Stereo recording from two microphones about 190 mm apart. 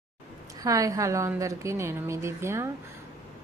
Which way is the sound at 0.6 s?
15° right (ahead or behind).